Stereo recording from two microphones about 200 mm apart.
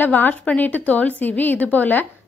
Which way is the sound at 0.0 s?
10° left (ahead or behind).